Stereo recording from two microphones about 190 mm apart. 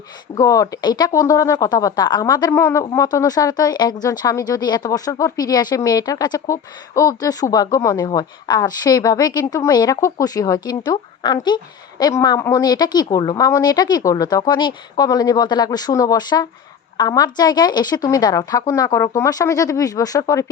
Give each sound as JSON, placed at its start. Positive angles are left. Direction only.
{"t": 0.3, "sound": "speech", "side_deg": 15}